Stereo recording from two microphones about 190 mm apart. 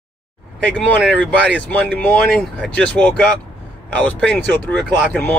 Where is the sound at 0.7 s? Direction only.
5° left (ahead or behind).